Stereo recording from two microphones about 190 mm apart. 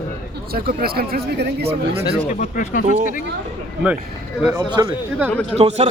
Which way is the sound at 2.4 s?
45° left (ahead or behind).